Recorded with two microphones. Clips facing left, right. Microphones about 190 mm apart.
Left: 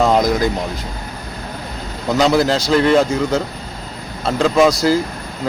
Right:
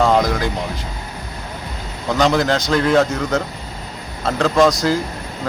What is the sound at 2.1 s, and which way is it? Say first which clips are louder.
Speech: left 2 dB; 10° left (ahead or behind).